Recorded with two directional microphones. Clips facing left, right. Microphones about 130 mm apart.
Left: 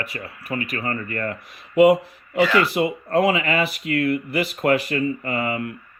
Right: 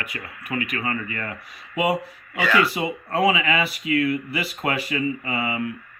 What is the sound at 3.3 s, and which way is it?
Speech, 50° left (ahead or behind).